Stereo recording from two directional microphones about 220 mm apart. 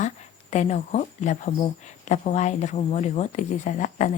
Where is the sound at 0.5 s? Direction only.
30° left (ahead or behind).